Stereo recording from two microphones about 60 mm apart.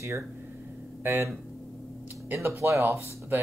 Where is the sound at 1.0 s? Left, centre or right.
Right.